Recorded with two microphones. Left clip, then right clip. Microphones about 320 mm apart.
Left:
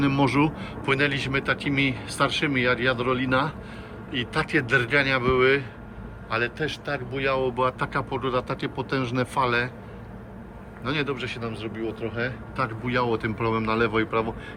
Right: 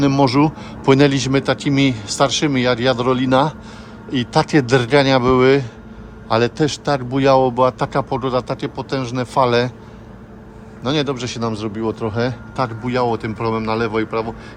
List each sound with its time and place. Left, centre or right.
0.0 s speech: centre
7.4 s speech: centre
10.8 s a man's voice: centre
12.8 s speech: centre